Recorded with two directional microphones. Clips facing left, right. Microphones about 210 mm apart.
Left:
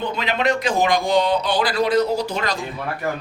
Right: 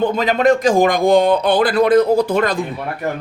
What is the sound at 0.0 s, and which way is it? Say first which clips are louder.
A woman's voice: right 7 dB; 45° right (ahead or behind).